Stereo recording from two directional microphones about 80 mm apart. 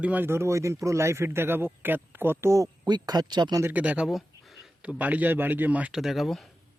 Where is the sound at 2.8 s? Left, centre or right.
Right.